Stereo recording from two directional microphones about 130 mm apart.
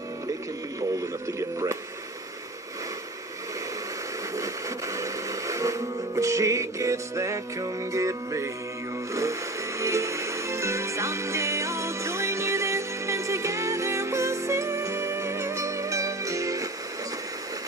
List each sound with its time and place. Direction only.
4.4 s music: 25° right (ahead or behind)